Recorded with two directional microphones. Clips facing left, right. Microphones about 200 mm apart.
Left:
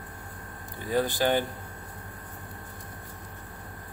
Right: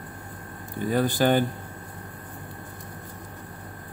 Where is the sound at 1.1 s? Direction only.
50° right (ahead or behind).